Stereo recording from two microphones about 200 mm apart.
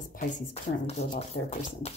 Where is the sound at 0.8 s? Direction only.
30° left (ahead or behind).